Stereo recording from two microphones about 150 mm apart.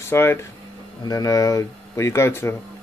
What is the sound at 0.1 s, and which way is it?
Speech, 15° left (ahead or behind).